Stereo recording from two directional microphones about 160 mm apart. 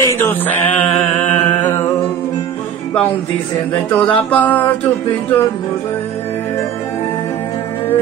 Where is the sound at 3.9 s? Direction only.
10° left (ahead or behind).